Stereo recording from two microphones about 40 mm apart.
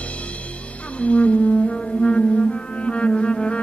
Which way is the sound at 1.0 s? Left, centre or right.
Left.